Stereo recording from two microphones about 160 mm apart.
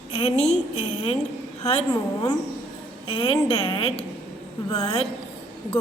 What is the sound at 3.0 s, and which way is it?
Speech, 35° left (ahead or behind).